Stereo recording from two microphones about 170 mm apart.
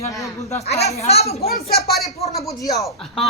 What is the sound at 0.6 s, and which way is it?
Speech, 40° left (ahead or behind).